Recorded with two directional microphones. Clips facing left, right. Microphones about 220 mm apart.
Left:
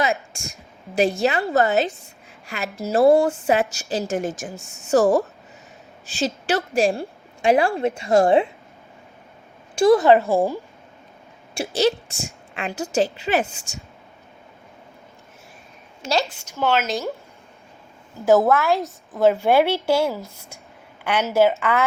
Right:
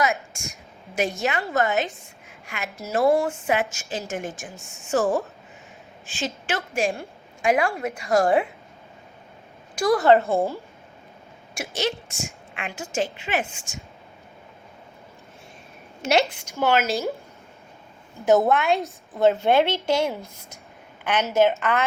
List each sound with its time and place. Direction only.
0.0 s a woman's voice: 30° left (ahead or behind)
9.7 s a woman's voice: 25° left (ahead or behind)
11.5 s a woman's voice: 35° left (ahead or behind)
16.6 s a woman's voice: 10° right (ahead or behind)
18.4 s a woman's voice: centre (ahead or behind)